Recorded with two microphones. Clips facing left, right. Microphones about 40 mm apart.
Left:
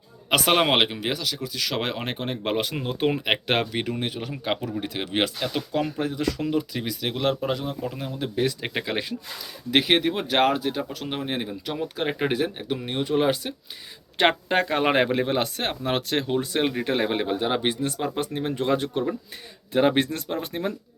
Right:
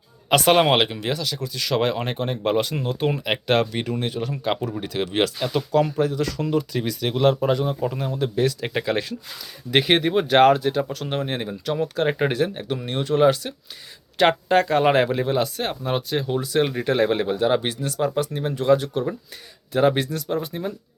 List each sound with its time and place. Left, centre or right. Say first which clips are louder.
0.3 s speech: right 4 dB; centre
7.6 s speech: right 6 dB; centre
8.2 s speech: right 3 dB; centre
9.7 s speech: right 3 dB; centre
14.2 s speech: right 3 dB; left
16.0 s speech: right 1 dB; left
16.8 s speech: right 4 dB; centre
17.7 s speech: right 2 dB; left